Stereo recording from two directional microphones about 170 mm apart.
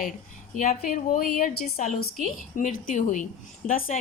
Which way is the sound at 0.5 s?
50° left (ahead or behind).